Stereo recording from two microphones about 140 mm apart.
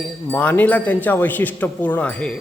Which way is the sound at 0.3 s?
10° left (ahead or behind).